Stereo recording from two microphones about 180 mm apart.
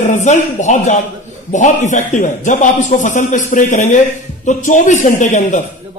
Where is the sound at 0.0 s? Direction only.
45° left (ahead or behind).